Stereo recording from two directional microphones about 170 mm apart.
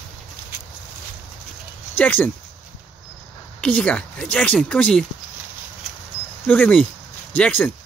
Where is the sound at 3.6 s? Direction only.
5° left (ahead or behind).